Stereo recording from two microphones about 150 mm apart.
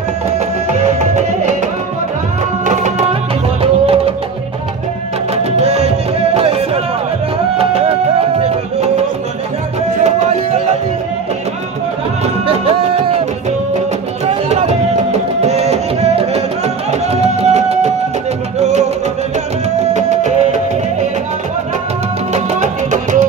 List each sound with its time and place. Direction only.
0.8 s music: 50° right (ahead or behind)
2.6 s music: 50° right (ahead or behind)
3.6 s music: 40° right (ahead or behind)
5.6 s music: 45° right (ahead or behind)
10.0 s music: 45° right (ahead or behind)
12.4 s music: 40° right (ahead or behind)
14.5 s music: 45° right (ahead or behind)
19.9 s music: 50° right (ahead or behind)
22.3 s music: 50° right (ahead or behind)